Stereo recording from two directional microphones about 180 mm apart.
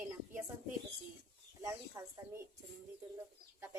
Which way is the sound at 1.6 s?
15° right (ahead or behind).